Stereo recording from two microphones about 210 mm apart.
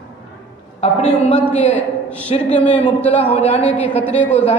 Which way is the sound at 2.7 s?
30° left (ahead or behind).